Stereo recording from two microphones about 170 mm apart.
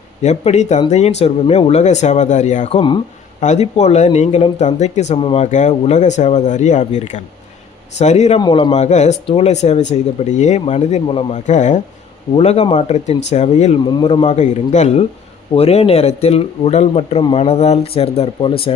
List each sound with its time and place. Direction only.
0.2 s speech: 40° left (ahead or behind)
3.4 s a man's voice: 40° left (ahead or behind)
8.4 s speech: 25° left (ahead or behind)
11.4 s a man's voice: 45° left (ahead or behind)
13.8 s speech: 30° left (ahead or behind)